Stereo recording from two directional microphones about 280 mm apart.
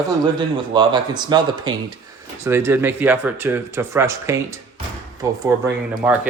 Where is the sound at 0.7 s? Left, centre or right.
Centre.